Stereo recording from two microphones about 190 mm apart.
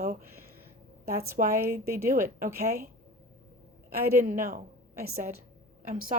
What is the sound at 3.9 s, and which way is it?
Speech, 45° right (ahead or behind).